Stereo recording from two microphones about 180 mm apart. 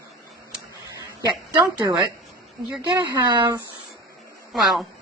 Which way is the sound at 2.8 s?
25° right (ahead or behind).